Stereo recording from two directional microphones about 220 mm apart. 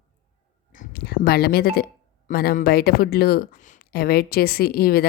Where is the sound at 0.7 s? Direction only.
40° left (ahead or behind).